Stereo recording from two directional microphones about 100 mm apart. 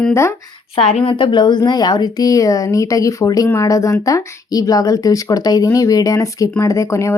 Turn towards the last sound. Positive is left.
turn(degrees=30)  # may be behind; listen again after turning